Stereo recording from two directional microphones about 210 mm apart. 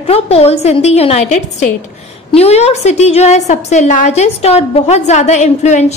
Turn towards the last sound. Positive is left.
turn(degrees=35)  # may be behind; listen again after turning